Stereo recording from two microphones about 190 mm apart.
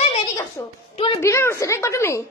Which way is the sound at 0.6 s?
15° left (ahead or behind).